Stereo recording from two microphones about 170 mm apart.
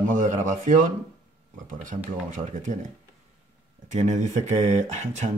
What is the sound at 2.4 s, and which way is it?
Speech, 45° right (ahead or behind).